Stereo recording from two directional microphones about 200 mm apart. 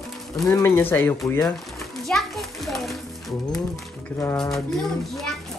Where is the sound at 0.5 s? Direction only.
10° left (ahead or behind).